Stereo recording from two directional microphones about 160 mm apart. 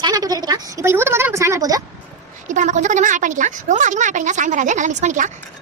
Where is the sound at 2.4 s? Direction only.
50° right (ahead or behind).